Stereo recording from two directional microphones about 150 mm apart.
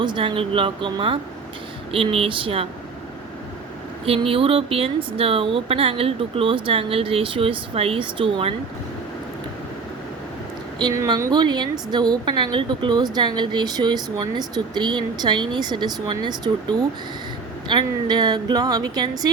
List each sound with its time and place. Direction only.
0.0 s speech: 30° right (ahead or behind)
4.0 s speech: 40° right (ahead or behind)
10.8 s a woman's voice: 25° right (ahead or behind)